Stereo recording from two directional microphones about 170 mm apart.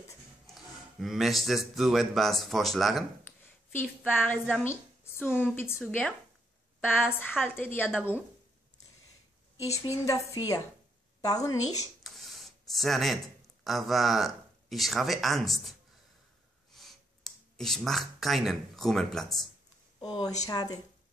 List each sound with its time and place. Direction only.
0.6 s speech: centre (ahead or behind)
3.7 s a woman's voice: 10° left (ahead or behind)
10.0 s a woman's voice: 20° left (ahead or behind)
12.0 s a sound: centre (ahead or behind)
13.7 s speech: centre (ahead or behind)
16.7 s speech: centre (ahead or behind)
20.0 s a woman's voice: 30° left (ahead or behind)